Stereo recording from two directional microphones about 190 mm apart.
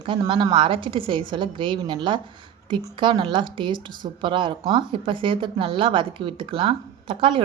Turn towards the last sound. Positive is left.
turn(degrees=-30)  # may be behind; listen again after turning